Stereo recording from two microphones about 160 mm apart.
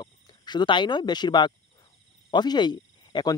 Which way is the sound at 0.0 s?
25° left (ahead or behind).